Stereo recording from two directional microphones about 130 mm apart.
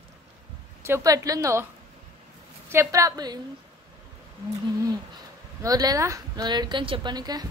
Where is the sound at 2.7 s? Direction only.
25° right (ahead or behind).